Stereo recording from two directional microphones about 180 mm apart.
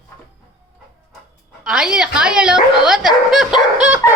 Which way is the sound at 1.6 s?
5° right (ahead or behind).